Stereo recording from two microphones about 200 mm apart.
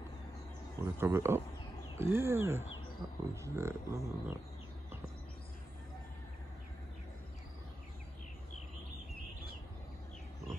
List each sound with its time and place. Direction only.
0.7 s speech: 10° right (ahead or behind)